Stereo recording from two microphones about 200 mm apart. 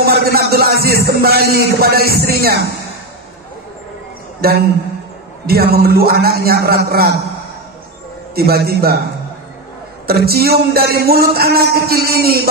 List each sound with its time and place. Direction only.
0.0 s music: 50° right (ahead or behind)
1.2 s speech: 50° right (ahead or behind)
4.4 s a woman's voice: 50° right (ahead or behind)
8.4 s speech: 50° right (ahead or behind)
10.0 s speech: 50° right (ahead or behind)